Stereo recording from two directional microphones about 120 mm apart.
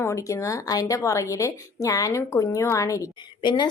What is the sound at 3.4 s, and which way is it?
Speech, 40° left (ahead or behind).